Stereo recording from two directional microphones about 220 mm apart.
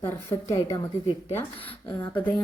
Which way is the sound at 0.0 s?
10° left (ahead or behind).